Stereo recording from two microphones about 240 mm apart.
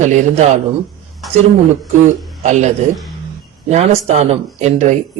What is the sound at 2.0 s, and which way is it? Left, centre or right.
A man's voice, right.